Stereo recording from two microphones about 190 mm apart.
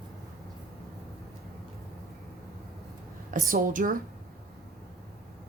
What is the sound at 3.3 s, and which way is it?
Speech, 45° right (ahead or behind).